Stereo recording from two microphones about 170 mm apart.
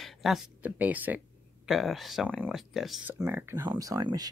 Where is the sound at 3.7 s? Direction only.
25° right (ahead or behind).